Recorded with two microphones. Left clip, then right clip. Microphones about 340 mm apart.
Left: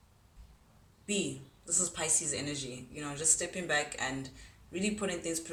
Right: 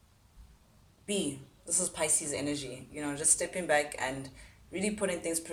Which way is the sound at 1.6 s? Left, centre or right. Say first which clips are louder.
Right 1 dB; centre.